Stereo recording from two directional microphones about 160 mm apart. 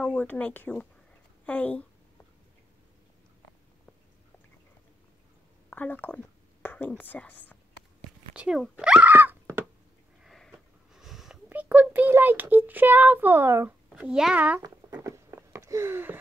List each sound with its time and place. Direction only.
0.0 s speech: 10° left (ahead or behind)
5.7 s a woman's voice: 10° left (ahead or behind)
8.3 s speech: 5° right (ahead or behind)
10.2 s sniff: centre (ahead or behind)
10.5 s snort: centre (ahead or behind)
11.4 s a child's voice: 10° right (ahead or behind)
13.8 s a child's voice: 5° right (ahead or behind)
14.6 s a sound: 20° right (ahead or behind)